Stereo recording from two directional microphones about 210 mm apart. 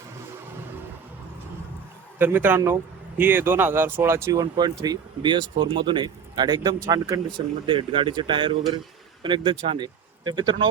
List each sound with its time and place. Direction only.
2.1 s speech: 10° right (ahead or behind)